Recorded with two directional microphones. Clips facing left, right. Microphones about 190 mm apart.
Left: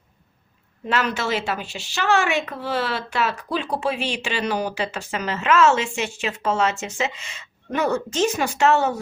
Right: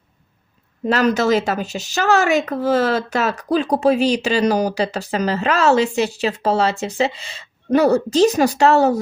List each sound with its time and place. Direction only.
0.9 s speech: 40° right (ahead or behind)